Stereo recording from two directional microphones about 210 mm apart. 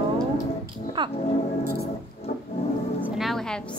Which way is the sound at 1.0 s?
20° right (ahead or behind).